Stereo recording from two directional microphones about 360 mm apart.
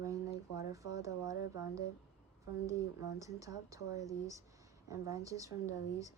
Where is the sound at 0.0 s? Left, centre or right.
Centre.